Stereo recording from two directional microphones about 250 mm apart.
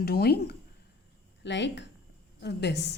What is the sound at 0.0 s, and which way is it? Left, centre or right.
A woman's voice, left.